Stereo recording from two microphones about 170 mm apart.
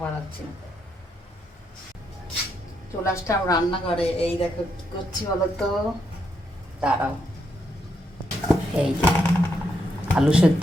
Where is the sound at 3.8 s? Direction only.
35° left (ahead or behind).